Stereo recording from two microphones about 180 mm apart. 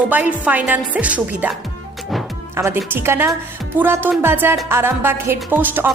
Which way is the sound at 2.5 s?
15° right (ahead or behind).